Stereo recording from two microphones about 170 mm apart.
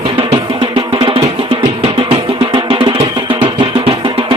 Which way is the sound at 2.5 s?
30° right (ahead or behind).